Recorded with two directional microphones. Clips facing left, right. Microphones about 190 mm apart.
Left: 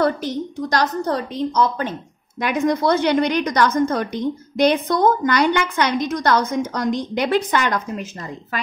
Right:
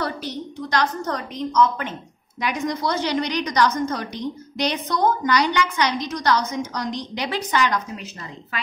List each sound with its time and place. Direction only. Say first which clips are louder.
0.0 s a woman's voice: left 8 dB; 50° left (ahead or behind)
2.4 s a woman's voice: left 6 dB; 55° left (ahead or behind)